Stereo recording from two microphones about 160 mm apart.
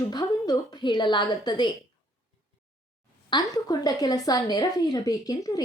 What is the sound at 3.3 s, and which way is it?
A woman's voice, 25° left (ahead or behind).